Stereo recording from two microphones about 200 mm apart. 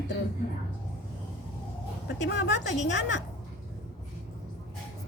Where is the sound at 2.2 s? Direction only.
65° left (ahead or behind).